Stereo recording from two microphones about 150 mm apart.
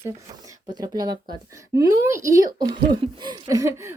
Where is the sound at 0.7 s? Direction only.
30° right (ahead or behind).